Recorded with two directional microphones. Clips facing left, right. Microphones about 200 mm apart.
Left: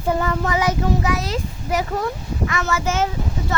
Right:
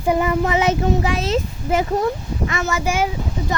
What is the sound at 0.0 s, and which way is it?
Speech, 15° right (ahead or behind).